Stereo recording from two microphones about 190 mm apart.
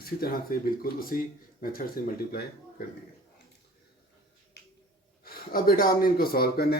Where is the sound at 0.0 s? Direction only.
50° left (ahead or behind).